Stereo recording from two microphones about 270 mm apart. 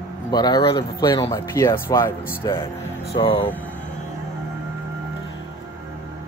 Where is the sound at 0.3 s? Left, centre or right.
Centre.